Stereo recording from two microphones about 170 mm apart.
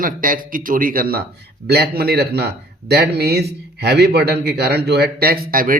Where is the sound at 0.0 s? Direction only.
55° right (ahead or behind).